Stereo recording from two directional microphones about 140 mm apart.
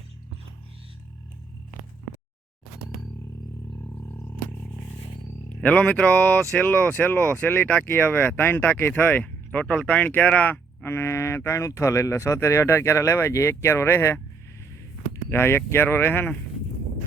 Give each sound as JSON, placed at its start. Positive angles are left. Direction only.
{"t": 5.5, "sound": "speech", "side_deg": 10}
{"t": 15.3, "sound": "speech", "side_deg": 15}